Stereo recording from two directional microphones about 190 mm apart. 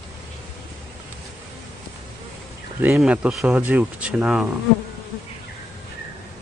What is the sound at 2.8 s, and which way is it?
Speech, 10° right (ahead or behind).